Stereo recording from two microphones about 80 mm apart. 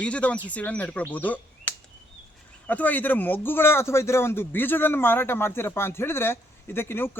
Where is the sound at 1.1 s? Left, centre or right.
Centre.